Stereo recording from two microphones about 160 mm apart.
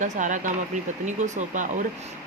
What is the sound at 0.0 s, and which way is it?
Speech, 50° right (ahead or behind).